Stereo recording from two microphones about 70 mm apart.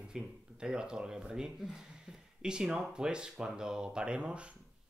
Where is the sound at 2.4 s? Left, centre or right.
Centre.